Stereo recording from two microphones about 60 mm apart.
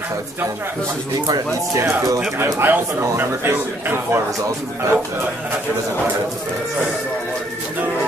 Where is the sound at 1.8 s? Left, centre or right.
Right.